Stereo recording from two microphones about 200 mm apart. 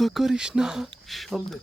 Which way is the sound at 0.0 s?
Centre (ahead or behind).